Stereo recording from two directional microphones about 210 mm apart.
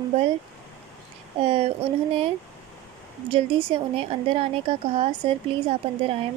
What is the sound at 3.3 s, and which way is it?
Speech, 25° right (ahead or behind).